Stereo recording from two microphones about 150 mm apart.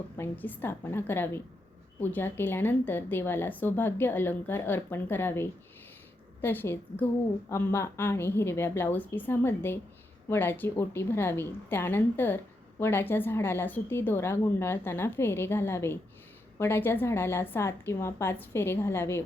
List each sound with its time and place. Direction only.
0.2 s a woman's voice: 10° left (ahead or behind)